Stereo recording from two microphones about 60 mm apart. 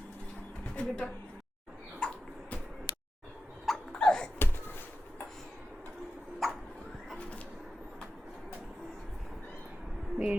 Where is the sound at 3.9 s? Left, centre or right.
Centre.